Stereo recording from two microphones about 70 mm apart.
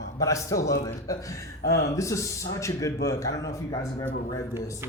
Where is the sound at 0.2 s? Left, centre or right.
Left.